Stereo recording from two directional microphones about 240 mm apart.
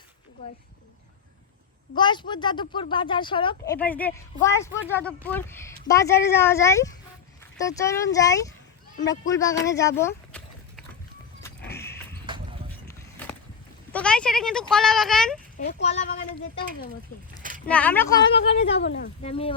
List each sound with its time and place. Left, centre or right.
2.0 s speech: centre
3.8 s speech: centre
11.8 s horse: centre
12.2 s horse: right
12.9 s skateboard: centre
13.9 s speech: centre
17.7 s speech: centre
18.5 s speech: left
19.2 s speech: left